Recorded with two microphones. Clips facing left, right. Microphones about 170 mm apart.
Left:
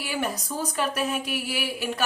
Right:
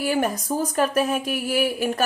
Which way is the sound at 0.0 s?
45° right (ahead or behind).